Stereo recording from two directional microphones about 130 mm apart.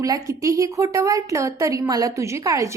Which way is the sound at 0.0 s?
25° right (ahead or behind).